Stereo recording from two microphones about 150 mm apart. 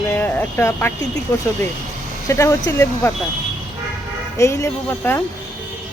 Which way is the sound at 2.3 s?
20° left (ahead or behind).